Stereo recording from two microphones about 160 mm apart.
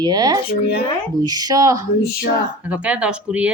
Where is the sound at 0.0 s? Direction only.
25° right (ahead or behind).